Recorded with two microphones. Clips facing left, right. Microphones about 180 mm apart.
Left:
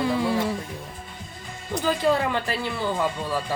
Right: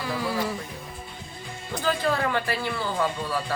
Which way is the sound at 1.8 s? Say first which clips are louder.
Left 3 dB; 15° left (ahead or behind).